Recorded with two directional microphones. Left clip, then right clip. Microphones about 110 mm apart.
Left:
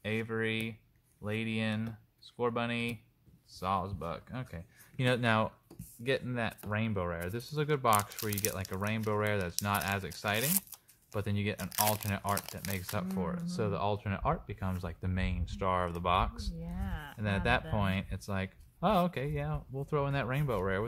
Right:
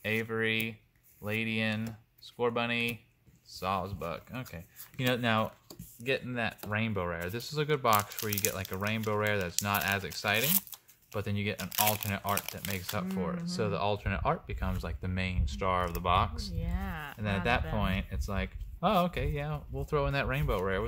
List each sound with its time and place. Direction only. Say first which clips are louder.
0.0 s a sound: right 3 dB; 20° left (ahead or behind)
3.4 s speech: even; 30° left (ahead or behind)
6.7 s speech: right 2 dB; 20° left (ahead or behind)
11.1 s speech: right 1 dB; 35° left (ahead or behind)
11.5 s speech: right 2 dB; 20° left (ahead or behind)
12.7 s speech: right 1 dB; 30° left (ahead or behind)
16.7 s speech: right 6 dB; 50° right (ahead or behind)
17.2 s speech: even; 30° left (ahead or behind)